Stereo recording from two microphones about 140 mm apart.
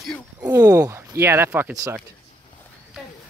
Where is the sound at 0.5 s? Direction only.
25° right (ahead or behind).